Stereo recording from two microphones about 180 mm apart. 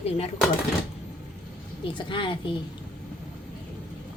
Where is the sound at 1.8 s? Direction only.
25° left (ahead or behind).